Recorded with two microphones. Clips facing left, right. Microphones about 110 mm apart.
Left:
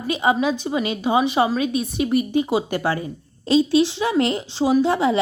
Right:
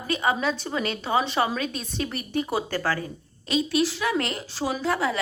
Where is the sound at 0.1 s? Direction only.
20° left (ahead or behind).